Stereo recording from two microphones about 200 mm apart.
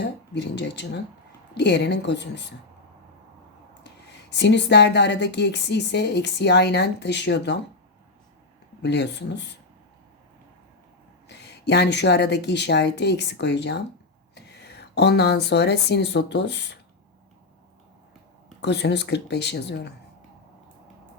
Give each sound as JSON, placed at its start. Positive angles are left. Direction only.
{"t": 0.0, "sound": "speech", "side_deg": 60}
{"t": 4.3, "sound": "speech", "side_deg": 60}
{"t": 8.8, "sound": "speech", "side_deg": 60}
{"t": 11.3, "sound": "speech", "side_deg": 55}
{"t": 18.6, "sound": "speech", "side_deg": 60}